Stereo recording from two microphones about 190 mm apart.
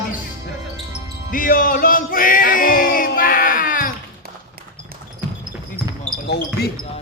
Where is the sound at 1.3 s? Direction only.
45° left (ahead or behind).